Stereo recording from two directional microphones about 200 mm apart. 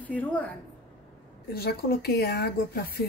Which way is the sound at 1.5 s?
50° left (ahead or behind).